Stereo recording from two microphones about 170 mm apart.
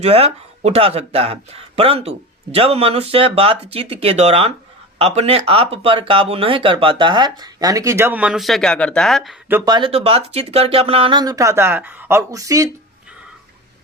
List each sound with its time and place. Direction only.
0.0 s speech: 35° right (ahead or behind); by 9.3 s centre (ahead or behind)
9.6 s speech: 30° right (ahead or behind)